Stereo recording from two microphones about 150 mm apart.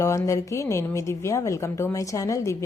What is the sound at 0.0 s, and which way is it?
A woman's voice, 20° left (ahead or behind).